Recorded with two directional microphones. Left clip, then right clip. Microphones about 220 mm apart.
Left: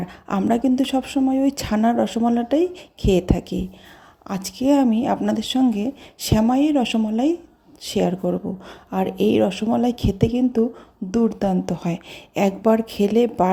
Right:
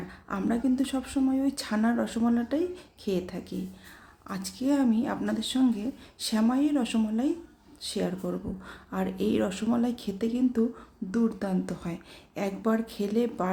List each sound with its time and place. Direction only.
0.3 s speech: 30° left (ahead or behind)